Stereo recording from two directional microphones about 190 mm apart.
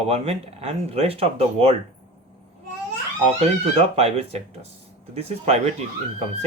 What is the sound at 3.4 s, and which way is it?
Speech, 30° right (ahead or behind).